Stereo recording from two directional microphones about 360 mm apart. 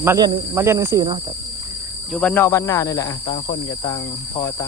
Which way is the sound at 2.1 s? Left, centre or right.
Centre.